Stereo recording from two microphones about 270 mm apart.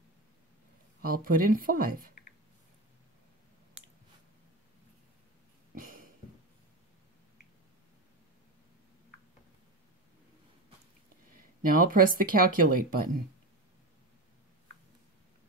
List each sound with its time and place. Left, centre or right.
1.0 s speech: right
5.8 s a sound: right
11.6 s speech: right